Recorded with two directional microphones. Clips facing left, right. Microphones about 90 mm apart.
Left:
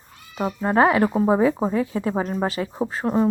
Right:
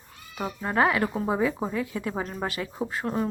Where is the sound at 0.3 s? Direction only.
30° left (ahead or behind).